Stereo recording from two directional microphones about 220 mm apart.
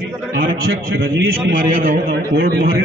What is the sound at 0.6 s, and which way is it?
Speech, 60° right (ahead or behind).